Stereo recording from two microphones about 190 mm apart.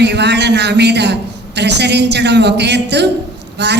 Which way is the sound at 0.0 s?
65° right (ahead or behind).